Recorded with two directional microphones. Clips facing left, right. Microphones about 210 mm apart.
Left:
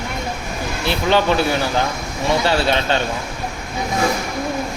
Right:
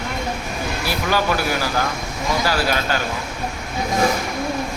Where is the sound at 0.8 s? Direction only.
25° left (ahead or behind).